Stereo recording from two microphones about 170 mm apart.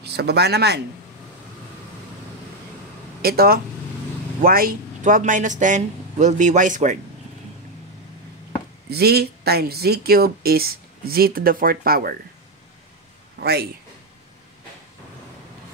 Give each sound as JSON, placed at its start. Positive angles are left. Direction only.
{"t": 0.0, "sound": "speech", "side_deg": -75}
{"t": 3.2, "sound": "speech", "side_deg": -60}
{"t": 8.9, "sound": "speech", "side_deg": -70}
{"t": 13.4, "sound": "a man's voice", "side_deg": -70}